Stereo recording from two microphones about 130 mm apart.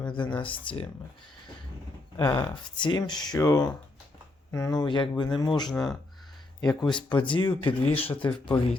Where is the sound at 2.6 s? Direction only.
35° left (ahead or behind).